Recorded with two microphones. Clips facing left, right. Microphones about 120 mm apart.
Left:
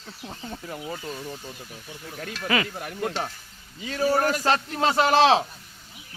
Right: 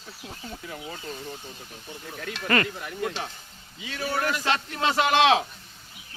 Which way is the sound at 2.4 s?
5° left (ahead or behind).